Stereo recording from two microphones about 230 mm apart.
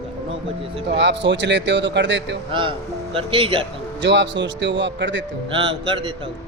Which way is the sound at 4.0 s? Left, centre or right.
Right.